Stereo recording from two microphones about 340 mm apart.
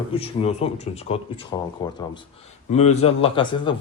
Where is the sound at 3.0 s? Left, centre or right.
Centre.